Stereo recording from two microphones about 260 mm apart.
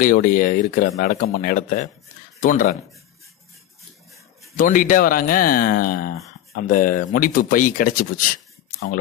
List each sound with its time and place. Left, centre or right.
0.0 s speech: left
4.6 s speech: left